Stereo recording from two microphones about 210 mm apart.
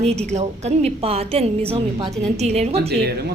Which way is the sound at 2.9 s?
50° right (ahead or behind).